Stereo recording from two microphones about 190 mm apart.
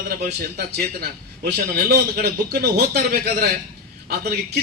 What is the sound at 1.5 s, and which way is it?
A man's voice, 55° right (ahead or behind).